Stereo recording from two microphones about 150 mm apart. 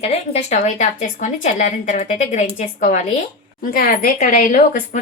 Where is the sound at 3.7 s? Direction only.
75° left (ahead or behind).